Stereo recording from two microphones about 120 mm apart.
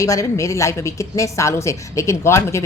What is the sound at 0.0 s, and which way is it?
A woman's voice, 25° left (ahead or behind).